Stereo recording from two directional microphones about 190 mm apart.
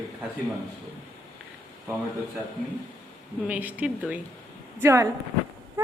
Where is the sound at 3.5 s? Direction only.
10° right (ahead or behind).